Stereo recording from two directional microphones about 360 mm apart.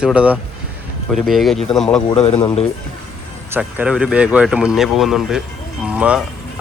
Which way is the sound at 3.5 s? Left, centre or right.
Centre.